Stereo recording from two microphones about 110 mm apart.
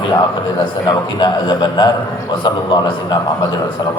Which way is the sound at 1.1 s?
45° left (ahead or behind).